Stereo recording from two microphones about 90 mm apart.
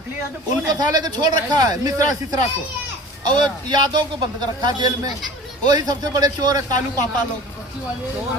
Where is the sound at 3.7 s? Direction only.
55° right (ahead or behind).